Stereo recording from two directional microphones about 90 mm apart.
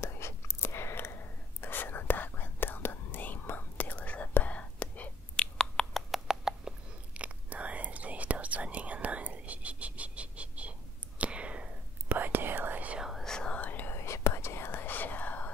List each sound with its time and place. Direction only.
0.0 s whispering: 30° left (ahead or behind); by 13.0 s 15° right (ahead or behind)
13.0 s whispering: centre (ahead or behind); by 15.5 s 20° left (ahead or behind)